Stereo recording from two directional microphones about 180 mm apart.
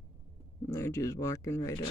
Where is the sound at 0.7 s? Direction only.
15° left (ahead or behind).